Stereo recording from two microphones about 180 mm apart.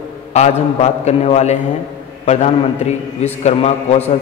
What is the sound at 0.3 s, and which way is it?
A man's voice, 35° left (ahead or behind).